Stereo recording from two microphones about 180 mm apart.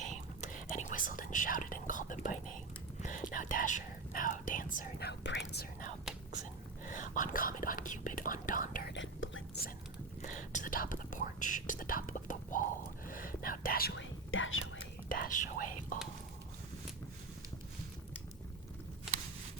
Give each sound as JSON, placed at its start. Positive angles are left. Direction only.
{"t": 0.0, "sound": "whispering", "side_deg": 45}
{"t": 6.1, "sound": "whispering", "side_deg": 0}
{"t": 6.8, "sound": "whispering", "side_deg": 45}
{"t": 8.9, "sound": "whispering", "side_deg": 90}
{"t": 10.2, "sound": "whispering", "side_deg": 45}
{"t": 13.9, "sound": "whispering", "side_deg": 90}
{"t": 15.1, "sound": "whispering", "side_deg": 45}